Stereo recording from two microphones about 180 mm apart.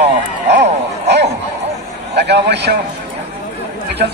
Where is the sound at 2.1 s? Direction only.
70° right (ahead or behind).